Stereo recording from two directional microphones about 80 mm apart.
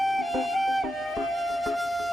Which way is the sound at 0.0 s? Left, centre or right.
Centre.